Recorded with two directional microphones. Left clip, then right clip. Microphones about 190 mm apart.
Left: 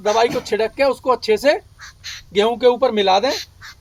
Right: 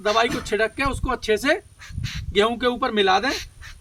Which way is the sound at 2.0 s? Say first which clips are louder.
Left 2 dB; 30° right (ahead or behind).